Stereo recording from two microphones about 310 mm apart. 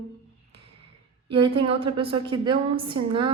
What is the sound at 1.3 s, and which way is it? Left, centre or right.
A woman's voice, centre.